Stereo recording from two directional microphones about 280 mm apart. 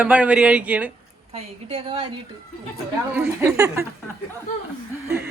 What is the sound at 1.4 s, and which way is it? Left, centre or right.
Speech, centre.